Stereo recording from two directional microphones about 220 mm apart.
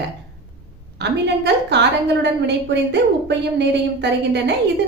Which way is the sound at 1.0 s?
50° right (ahead or behind).